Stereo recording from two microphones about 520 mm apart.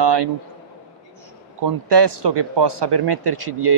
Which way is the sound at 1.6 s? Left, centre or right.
Right.